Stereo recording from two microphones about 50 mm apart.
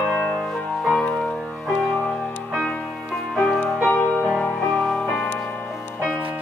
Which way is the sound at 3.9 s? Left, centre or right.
Left.